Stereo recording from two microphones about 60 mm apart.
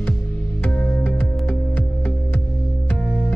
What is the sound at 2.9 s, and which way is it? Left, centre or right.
Music, left.